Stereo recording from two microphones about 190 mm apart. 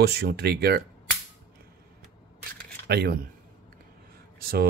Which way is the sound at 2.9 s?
60° right (ahead or behind).